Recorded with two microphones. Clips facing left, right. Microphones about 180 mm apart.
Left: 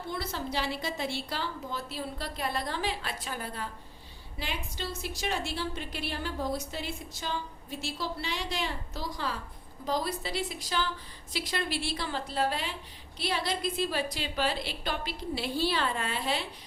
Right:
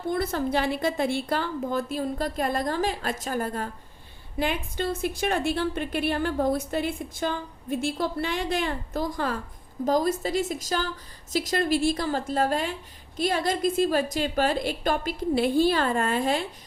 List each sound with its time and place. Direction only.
0.1 s a woman's voice: 50° right (ahead or behind)